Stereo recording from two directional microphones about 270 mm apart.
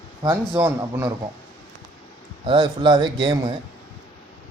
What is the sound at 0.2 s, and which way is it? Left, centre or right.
Speech, centre.